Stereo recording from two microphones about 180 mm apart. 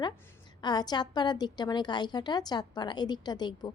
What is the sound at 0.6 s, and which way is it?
A woman's voice, 25° left (ahead or behind).